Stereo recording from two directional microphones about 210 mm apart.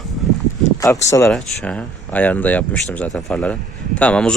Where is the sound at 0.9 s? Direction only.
15° left (ahead or behind).